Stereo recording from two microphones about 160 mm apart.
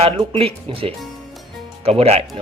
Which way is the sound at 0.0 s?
35° right (ahead or behind).